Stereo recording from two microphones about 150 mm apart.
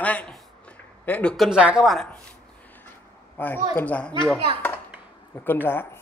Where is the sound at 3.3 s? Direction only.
10° left (ahead or behind).